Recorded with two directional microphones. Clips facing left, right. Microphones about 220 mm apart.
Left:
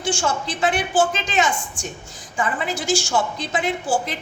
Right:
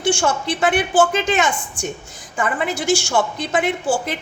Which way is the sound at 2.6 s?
60° right (ahead or behind).